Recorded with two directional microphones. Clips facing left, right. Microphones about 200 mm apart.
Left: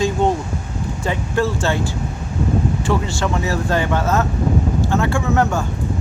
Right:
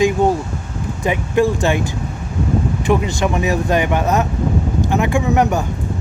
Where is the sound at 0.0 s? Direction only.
10° right (ahead or behind).